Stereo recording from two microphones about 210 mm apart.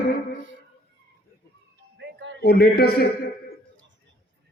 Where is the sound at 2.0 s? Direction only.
60° right (ahead or behind).